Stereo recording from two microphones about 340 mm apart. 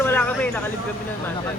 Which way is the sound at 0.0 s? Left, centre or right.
Centre.